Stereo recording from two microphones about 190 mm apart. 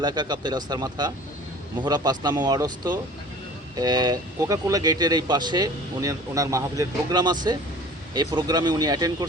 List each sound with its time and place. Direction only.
0.0 s speech: 20° right (ahead or behind)